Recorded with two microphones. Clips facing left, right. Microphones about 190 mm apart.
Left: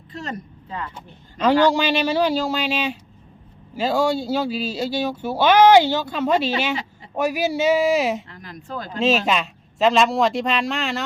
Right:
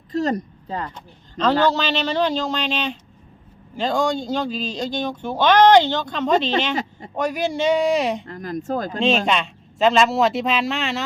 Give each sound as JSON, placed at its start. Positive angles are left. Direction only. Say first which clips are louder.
{"t": 0.1, "sound": "speech", "louder": "right 10 dB", "side_deg": -40}
{"t": 0.9, "sound": "speech", "louder": "right 3 dB", "side_deg": 10}
{"t": 8.3, "sound": "speech", "louder": "right 9 dB", "side_deg": -45}
{"t": 9.0, "sound": "speech", "louder": "left 1 dB", "side_deg": 0}